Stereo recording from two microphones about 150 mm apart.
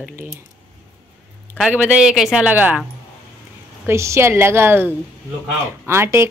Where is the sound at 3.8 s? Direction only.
20° right (ahead or behind).